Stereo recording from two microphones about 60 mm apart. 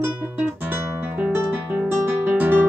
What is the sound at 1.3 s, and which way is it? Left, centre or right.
Music, right.